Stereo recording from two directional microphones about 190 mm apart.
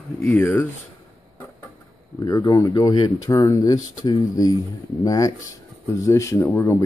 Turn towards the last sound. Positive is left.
turn(degrees=15)  # may be behind; listen again after turning